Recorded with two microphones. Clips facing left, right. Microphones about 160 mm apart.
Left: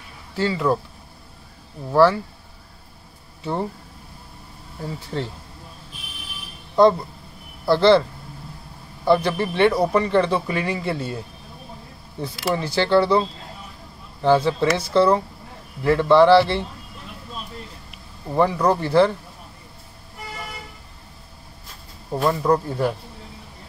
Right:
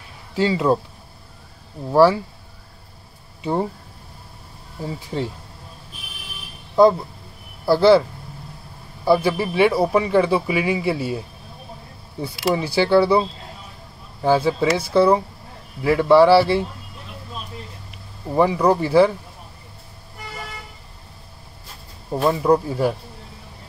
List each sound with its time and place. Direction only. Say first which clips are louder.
0.4 s speech: right 3 dB; 20° right (ahead or behind)
1.9 s speech: right 2 dB; 10° right (ahead or behind)
4.8 s speech: right 2 dB; 10° right (ahead or behind)
6.7 s speech: right 1 dB; 5° right (ahead or behind)
9.0 s speech: right 1 dB; 5° right (ahead or behind)
14.2 s speech: even; 10° right (ahead or behind)
18.3 s speech: right 2 dB; 10° right (ahead or behind)
22.1 s speech: right 2 dB; 10° right (ahead or behind)